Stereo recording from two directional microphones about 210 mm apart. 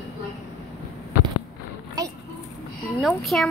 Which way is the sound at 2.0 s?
15° right (ahead or behind).